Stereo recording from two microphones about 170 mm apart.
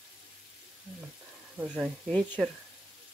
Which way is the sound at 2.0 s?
5° left (ahead or behind).